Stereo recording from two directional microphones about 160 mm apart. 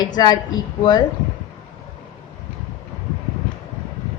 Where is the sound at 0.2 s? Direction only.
25° left (ahead or behind).